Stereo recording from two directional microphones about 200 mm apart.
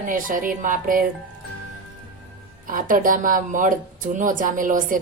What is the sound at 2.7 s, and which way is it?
Speech, 45° right (ahead or behind).